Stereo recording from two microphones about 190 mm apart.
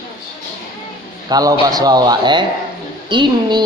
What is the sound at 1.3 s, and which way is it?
A man's voice, 20° right (ahead or behind).